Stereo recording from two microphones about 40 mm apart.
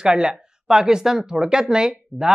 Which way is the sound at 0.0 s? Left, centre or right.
Centre.